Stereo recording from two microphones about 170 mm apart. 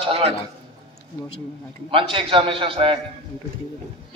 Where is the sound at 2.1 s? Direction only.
30° right (ahead or behind).